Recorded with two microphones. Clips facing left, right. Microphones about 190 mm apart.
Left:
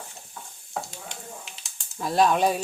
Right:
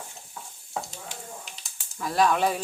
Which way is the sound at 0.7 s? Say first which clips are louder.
Even; 5° right (ahead or behind).